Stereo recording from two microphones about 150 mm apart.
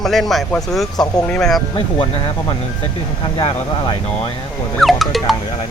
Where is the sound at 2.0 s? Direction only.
40° left (ahead or behind).